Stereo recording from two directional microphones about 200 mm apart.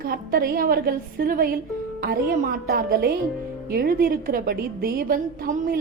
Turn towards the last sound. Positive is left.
turn(degrees=-45)  # may be behind; listen again after turning